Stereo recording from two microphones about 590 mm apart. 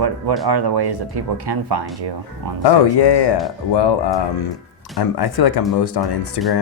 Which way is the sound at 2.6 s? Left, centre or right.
Left.